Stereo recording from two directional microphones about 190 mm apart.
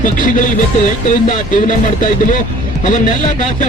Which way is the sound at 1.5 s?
45° left (ahead or behind).